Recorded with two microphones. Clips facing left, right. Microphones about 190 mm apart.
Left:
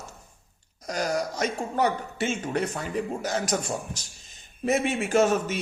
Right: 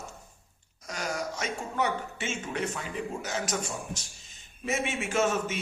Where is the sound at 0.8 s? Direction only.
35° left (ahead or behind).